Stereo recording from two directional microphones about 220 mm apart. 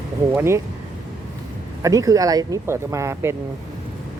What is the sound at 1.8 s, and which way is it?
Speech, 15° right (ahead or behind).